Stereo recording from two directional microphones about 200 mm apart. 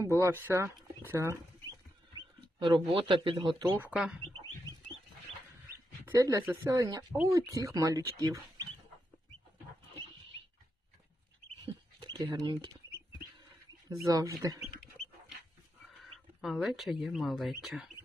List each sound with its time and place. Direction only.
0.2 s speech: 15° right (ahead or behind)
2.1 s speech: 25° right (ahead or behind)
3.6 s speech: 10° right (ahead or behind)
6.1 s speech: 15° right (ahead or behind)
11.6 s rodents: 20° right (ahead or behind)
14.0 s speech: 15° right (ahead or behind)
16.4 s speech: centre (ahead or behind)